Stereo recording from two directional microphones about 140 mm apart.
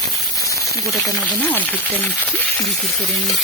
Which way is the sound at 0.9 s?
Centre (ahead or behind).